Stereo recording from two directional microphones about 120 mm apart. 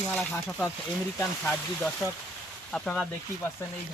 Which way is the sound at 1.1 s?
15° left (ahead or behind).